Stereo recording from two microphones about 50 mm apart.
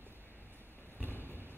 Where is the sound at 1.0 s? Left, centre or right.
Right.